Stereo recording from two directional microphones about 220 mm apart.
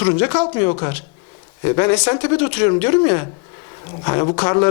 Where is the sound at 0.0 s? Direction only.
15° left (ahead or behind).